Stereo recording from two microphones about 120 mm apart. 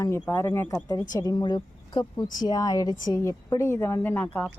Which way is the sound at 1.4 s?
35° left (ahead or behind).